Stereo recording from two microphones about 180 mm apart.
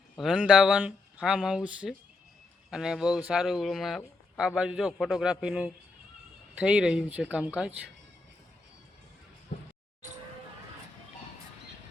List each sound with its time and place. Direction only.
0.2 s speech: 5° right (ahead or behind)